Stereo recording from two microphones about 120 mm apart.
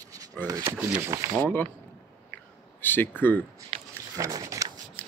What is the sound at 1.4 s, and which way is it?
Speech, 15° left (ahead or behind).